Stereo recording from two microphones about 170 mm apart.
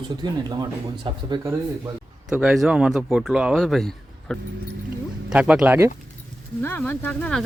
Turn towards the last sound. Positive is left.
turn(degrees=5)  # may be behind; listen again after turning